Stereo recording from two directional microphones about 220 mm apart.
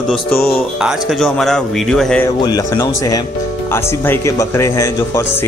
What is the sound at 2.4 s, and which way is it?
A man's voice, 15° left (ahead or behind).